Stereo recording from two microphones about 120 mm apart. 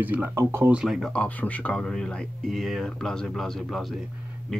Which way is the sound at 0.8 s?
Centre (ahead or behind).